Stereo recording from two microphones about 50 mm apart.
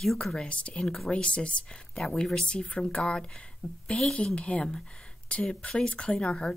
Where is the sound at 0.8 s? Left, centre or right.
Centre.